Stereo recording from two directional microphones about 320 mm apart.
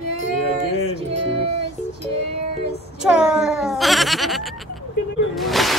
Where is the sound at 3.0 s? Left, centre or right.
Centre.